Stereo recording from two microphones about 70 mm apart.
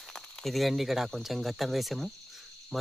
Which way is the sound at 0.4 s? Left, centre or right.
Centre.